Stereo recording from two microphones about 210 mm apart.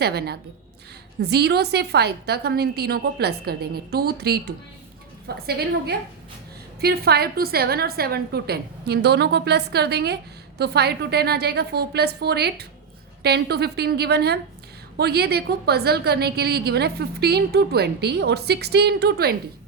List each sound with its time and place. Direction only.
0.0 s a woman's voice: 50° right (ahead or behind)